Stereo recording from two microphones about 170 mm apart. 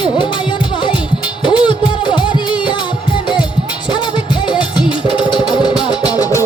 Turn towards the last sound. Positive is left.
turn(degrees=20)  # may be behind; listen again after turning